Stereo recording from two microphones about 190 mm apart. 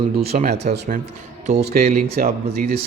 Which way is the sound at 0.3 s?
45° right (ahead or behind).